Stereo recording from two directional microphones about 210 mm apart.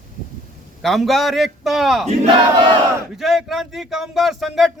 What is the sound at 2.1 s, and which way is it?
Battle cry, 25° right (ahead or behind).